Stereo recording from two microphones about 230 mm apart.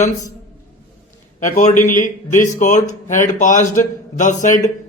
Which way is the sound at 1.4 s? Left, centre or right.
Left.